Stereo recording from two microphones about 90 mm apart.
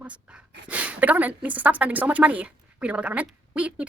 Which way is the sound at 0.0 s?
15° right (ahead or behind).